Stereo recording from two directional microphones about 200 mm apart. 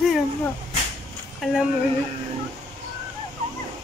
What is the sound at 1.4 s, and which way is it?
Speech, 5° right (ahead or behind).